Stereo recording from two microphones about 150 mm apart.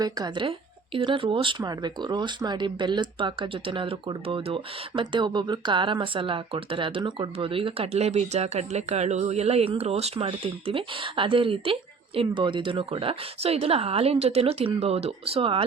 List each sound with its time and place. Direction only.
0.0 s speech: 30° right (ahead or behind)